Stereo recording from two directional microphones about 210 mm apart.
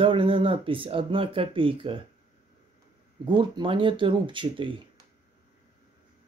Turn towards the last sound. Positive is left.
turn(degrees=-25)  # may be behind; listen again after turning